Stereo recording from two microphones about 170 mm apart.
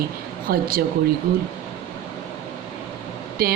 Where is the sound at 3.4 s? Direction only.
60° right (ahead or behind).